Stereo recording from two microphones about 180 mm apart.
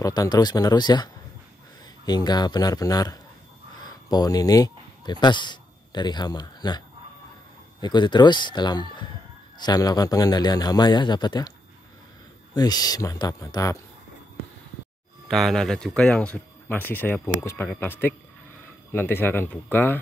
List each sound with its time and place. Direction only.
0.0 s a man's voice: 20° left (ahead or behind)
7.8 s a man's voice: 25° left (ahead or behind)
12.5 s a man's voice: 20° left (ahead or behind)
15.2 s speech: centre (ahead or behind)